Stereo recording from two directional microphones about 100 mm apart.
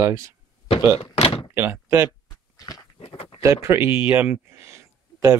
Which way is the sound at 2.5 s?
40° left (ahead or behind).